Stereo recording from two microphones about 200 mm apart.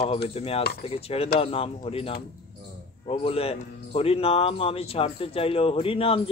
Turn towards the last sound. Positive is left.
turn(degrees=25)  # may be behind; listen again after turning